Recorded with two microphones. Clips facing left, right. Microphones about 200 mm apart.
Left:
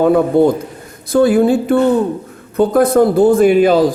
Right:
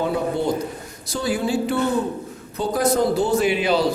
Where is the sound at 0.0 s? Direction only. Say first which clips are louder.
Left 11 dB; 55° left (ahead or behind).